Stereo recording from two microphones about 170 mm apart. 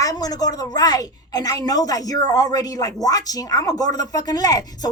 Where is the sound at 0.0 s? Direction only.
20° left (ahead or behind).